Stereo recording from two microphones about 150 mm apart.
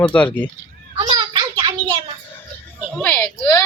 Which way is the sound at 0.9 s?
35° right (ahead or behind).